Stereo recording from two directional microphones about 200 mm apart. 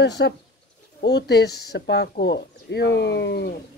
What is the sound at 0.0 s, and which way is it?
Speech, 55° left (ahead or behind).